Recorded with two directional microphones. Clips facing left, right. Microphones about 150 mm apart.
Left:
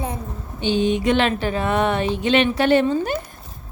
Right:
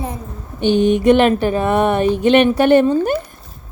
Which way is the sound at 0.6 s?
55° right (ahead or behind).